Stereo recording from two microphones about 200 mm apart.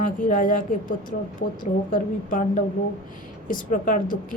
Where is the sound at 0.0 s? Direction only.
40° left (ahead or behind).